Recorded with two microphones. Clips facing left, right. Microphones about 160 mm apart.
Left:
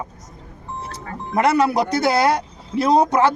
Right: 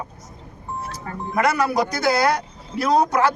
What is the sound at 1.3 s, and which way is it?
A man's voice, 25° left (ahead or behind).